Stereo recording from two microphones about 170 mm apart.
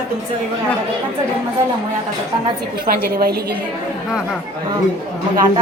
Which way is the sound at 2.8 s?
60° right (ahead or behind).